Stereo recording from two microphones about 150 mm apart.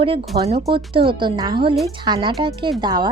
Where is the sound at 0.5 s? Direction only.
30° right (ahead or behind).